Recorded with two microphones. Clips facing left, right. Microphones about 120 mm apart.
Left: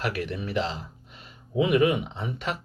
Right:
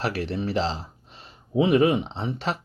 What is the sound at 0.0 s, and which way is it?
Speech, 30° right (ahead or behind).